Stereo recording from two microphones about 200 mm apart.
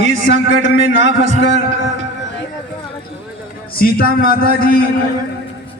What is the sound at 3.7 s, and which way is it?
Speech, 50° left (ahead or behind).